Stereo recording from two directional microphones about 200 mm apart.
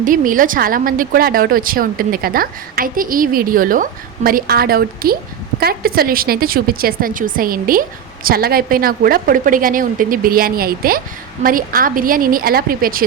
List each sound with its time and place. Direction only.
0.0 s speech: 40° right (ahead or behind)